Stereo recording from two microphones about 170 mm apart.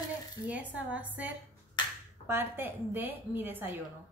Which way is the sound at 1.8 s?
25° left (ahead or behind).